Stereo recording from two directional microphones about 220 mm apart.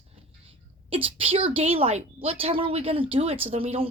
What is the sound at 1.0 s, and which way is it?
A woman's voice, 25° right (ahead or behind).